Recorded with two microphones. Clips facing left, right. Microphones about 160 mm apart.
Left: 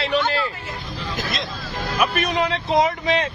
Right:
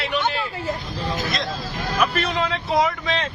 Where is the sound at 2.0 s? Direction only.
15° left (ahead or behind).